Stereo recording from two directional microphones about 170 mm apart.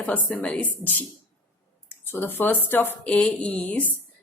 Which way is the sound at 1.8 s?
10° left (ahead or behind).